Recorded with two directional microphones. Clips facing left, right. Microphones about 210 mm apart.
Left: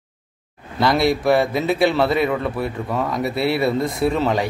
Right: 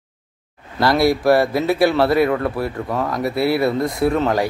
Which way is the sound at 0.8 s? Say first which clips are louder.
Right 2 dB; centre (ahead or behind).